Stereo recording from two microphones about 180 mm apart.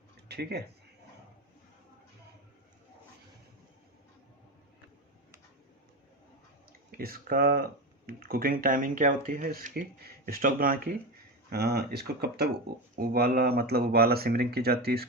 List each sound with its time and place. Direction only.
0.3 s speech: 65° right (ahead or behind)
6.9 s speech: 55° right (ahead or behind)
11.4 s speech: 65° right (ahead or behind)